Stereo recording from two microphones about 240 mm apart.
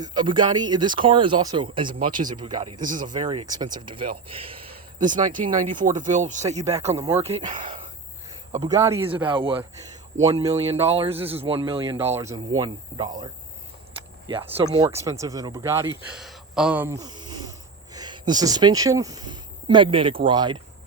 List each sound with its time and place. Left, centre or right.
0.0 s speech: centre
2.8 s speech: right
3.1 s speech: centre
6.9 s speech: centre
8.5 s speech: centre
11.9 s speech: centre
14.3 s speech: right
16.1 s a sound: centre
17.9 s speech: centre